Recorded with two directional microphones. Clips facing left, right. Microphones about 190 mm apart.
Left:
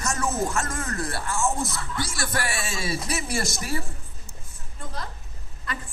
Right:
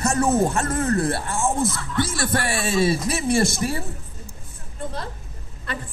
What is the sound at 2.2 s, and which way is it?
Speech, 30° right (ahead or behind).